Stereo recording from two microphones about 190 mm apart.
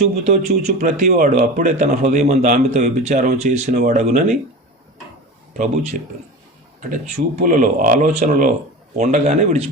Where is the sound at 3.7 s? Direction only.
50° right (ahead or behind).